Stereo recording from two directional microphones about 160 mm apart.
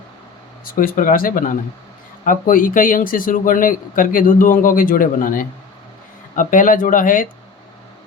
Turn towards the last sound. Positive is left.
turn(degrees=55)  # may be behind; listen again after turning